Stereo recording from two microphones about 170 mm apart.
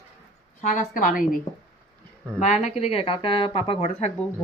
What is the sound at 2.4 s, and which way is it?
Speech, 40° left (ahead or behind).